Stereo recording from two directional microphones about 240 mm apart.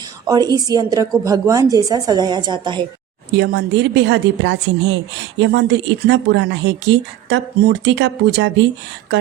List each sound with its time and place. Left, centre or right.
0.3 s a woman's voice: centre
3.3 s speech: right